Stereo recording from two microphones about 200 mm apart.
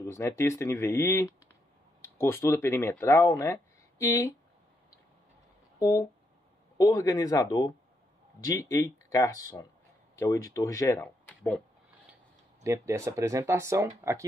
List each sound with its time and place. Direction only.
0.0 s speech: 15° left (ahead or behind)
5.8 s speech: 20° left (ahead or behind)
12.6 s speech: 15° right (ahead or behind)